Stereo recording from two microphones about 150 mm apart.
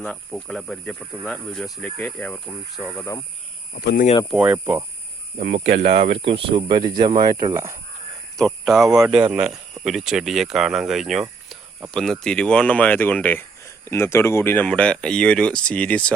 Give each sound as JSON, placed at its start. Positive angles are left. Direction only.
{"t": 0.0, "sound": "speech", "side_deg": 5}
{"t": 3.8, "sound": "speech", "side_deg": 90}
{"t": 4.3, "sound": "speech", "side_deg": -10}
{"t": 5.4, "sound": "speech", "side_deg": -60}
{"t": 5.8, "sound": "speech", "side_deg": -40}
{"t": 8.4, "sound": "speech", "side_deg": 0}